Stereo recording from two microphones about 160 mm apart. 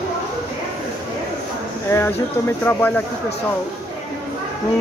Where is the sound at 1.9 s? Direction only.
15° left (ahead or behind).